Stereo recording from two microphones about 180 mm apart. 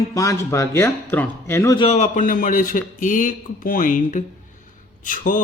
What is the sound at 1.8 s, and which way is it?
A man's voice, 35° left (ahead or behind).